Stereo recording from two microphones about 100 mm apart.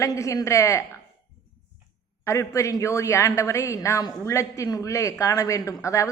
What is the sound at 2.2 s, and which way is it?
A woman's voice, 30° left (ahead or behind).